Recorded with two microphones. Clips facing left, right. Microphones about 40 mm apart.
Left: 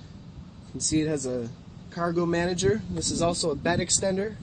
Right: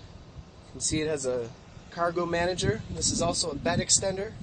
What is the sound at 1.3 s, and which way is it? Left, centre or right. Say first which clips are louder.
Speech: right 1 dB; right.